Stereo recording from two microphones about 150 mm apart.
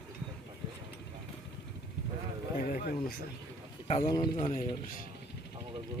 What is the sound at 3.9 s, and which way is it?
Speech, 40° left (ahead or behind).